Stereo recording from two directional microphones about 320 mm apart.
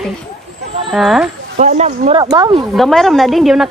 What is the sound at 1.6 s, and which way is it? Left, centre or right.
Speech, right.